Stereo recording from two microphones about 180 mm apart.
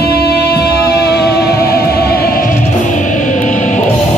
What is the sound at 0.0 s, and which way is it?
Music, 65° left (ahead or behind).